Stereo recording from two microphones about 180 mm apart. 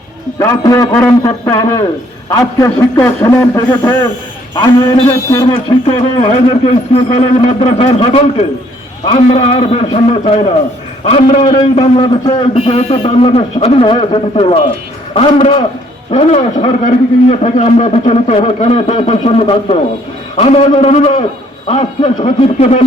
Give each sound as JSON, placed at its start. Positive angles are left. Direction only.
{"t": 0.3, "sound": "a man's voice", "side_deg": 20}